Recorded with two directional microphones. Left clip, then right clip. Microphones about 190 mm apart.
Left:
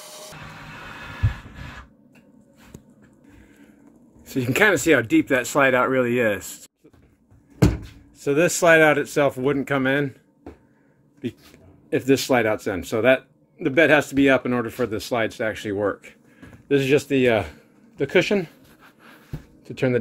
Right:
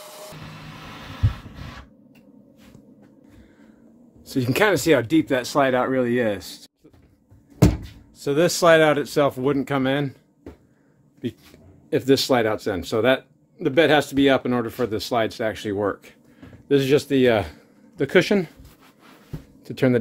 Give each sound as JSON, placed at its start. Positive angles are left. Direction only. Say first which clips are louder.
{"t": 0.0, "sound": "music", "louder": "right 1 dB", "side_deg": 0}
{"t": 4.3, "sound": "speech", "louder": "left 1 dB", "side_deg": -5}
{"t": 8.2, "sound": "speech", "louder": "even", "side_deg": 0}
{"t": 11.9, "sound": "a man's voice", "louder": "right 1 dB", "side_deg": 0}
{"t": 18.0, "sound": "speech", "louder": "right 1 dB", "side_deg": -20}
{"t": 19.6, "sound": "speech", "louder": "right 2 dB", "side_deg": -20}